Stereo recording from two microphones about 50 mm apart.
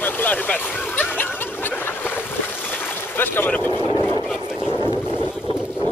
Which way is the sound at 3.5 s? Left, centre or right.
Left.